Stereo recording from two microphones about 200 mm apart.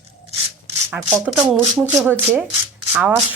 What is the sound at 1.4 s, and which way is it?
A woman's voice, 10° right (ahead or behind).